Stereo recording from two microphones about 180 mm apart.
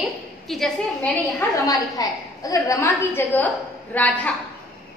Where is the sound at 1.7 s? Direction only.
20° left (ahead or behind).